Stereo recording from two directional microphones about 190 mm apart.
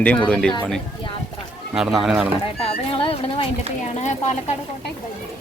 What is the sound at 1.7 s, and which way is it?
Speech, centre (ahead or behind).